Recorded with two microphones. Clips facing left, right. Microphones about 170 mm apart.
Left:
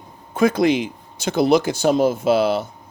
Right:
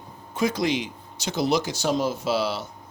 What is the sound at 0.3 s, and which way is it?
Speech, 55° left (ahead or behind).